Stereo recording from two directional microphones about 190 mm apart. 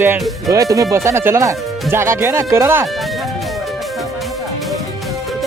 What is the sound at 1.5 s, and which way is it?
Speech, centre (ahead or behind).